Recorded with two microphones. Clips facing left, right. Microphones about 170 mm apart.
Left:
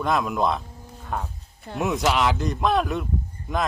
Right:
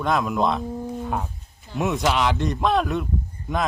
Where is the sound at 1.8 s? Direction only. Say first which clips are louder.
Even; centre (ahead or behind).